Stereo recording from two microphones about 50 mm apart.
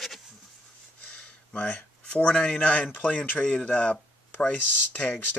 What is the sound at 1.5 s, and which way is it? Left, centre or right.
Speech, left.